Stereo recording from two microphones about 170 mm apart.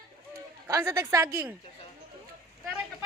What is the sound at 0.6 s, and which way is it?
Speech, 20° right (ahead or behind).